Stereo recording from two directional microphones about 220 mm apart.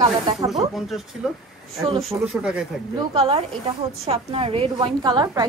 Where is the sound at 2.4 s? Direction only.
5° right (ahead or behind).